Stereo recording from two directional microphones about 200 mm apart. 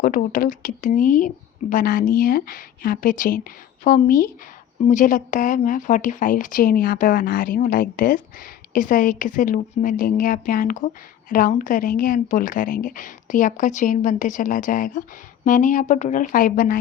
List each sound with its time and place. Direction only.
0.0 s a woman's voice: 45° left (ahead or behind)